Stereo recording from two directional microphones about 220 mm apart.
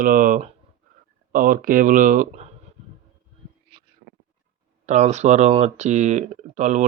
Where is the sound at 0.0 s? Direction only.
40° right (ahead or behind).